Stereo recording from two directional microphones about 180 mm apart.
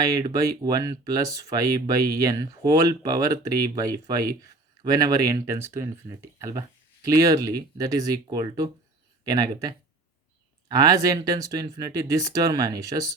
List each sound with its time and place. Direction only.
0.1 s speech: 20° right (ahead or behind)